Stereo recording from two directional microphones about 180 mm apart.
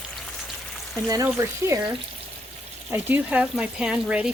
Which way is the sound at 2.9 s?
10° right (ahead or behind).